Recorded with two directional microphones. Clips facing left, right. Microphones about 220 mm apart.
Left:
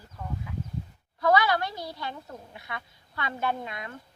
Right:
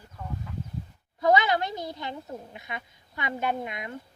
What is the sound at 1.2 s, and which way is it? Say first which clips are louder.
A woman's voice: right 1 dB; 20° right (ahead or behind).